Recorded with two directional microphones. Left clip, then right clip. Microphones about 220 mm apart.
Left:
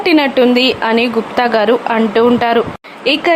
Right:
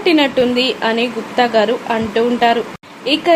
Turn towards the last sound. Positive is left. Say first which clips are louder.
# left 3 dB
turn(degrees=15)  # may be behind; listen again after turning